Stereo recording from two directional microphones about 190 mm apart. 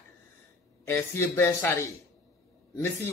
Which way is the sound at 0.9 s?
10° left (ahead or behind).